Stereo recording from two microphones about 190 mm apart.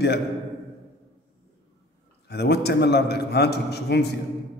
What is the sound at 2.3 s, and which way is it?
A man's voice, 60° left (ahead or behind).